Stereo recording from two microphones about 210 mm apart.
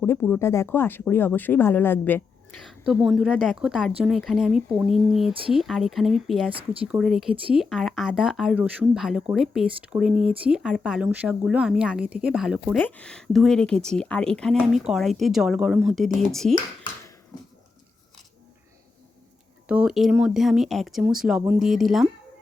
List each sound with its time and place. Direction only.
0.0 s speech: 5° left (ahead or behind)
2.6 s speech: 5° right (ahead or behind)
12.7 s speech: 5° left (ahead or behind)
19.6 s speech: 5° right (ahead or behind)